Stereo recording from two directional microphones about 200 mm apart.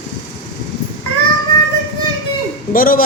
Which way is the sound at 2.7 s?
45° left (ahead or behind).